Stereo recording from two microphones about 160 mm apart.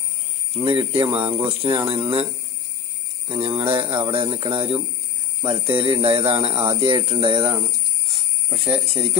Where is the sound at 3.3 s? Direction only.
35° right (ahead or behind).